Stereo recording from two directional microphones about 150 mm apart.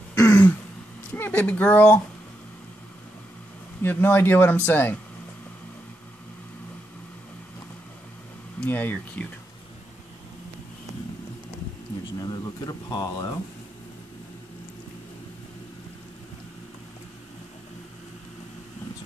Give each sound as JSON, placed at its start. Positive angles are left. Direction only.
{"t": 0.1, "sound": "throat clearing", "side_deg": 20}
{"t": 1.1, "sound": "speech", "side_deg": 15}
{"t": 3.8, "sound": "speech", "side_deg": 15}
{"t": 8.5, "sound": "speech", "side_deg": 15}
{"t": 12.2, "sound": "speech", "side_deg": 25}